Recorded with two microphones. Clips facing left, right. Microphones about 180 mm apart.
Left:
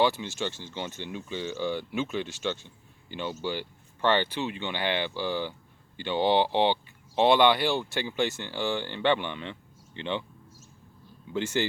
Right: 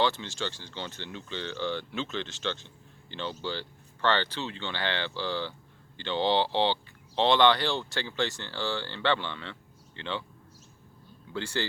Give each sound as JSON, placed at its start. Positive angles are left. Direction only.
{"t": 0.0, "sound": "speech", "side_deg": 15}
{"t": 11.3, "sound": "speech", "side_deg": 20}